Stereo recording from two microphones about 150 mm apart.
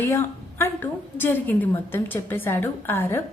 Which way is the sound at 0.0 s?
15° left (ahead or behind).